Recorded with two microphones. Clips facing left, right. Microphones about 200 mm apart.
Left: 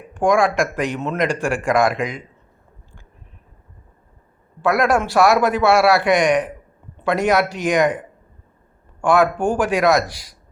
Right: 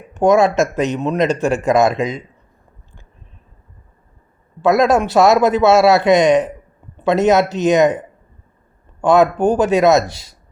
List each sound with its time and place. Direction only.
0.1 s speech: 25° right (ahead or behind)
4.6 s speech: 20° right (ahead or behind)